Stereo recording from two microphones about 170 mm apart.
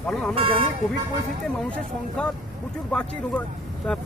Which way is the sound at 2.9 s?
5° left (ahead or behind).